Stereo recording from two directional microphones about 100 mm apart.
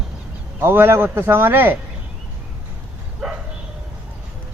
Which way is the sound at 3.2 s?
5° right (ahead or behind).